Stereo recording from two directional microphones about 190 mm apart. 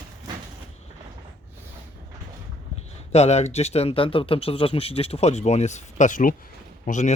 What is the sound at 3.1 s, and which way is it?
Speech, 35° left (ahead or behind).